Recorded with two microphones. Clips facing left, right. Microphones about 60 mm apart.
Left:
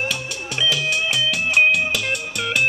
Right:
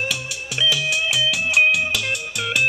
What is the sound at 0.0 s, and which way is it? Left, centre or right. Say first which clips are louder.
Music: left 1 dB; centre.